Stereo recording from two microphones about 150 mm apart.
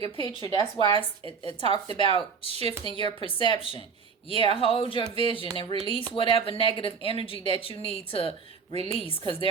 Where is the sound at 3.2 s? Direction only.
35° left (ahead or behind).